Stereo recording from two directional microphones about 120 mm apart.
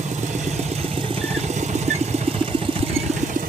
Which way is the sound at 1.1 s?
70° right (ahead or behind).